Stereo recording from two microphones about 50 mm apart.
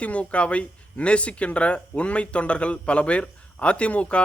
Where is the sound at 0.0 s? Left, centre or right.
Left.